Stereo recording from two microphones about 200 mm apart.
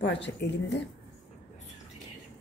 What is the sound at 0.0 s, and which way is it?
Speech, 60° left (ahead or behind).